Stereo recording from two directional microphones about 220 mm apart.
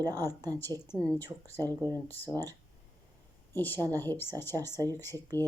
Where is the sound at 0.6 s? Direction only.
10° left (ahead or behind).